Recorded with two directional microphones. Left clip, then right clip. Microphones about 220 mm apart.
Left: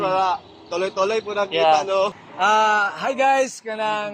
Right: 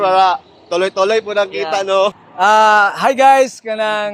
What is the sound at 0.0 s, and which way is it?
A man's voice, 50° right (ahead or behind).